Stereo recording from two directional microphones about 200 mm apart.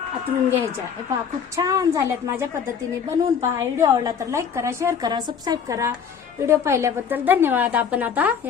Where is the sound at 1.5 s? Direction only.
15° right (ahead or behind).